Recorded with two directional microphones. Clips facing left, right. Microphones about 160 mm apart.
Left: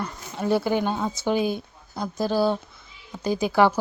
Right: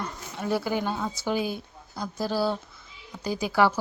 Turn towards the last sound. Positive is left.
turn(degrees=20)  # may be behind; listen again after turning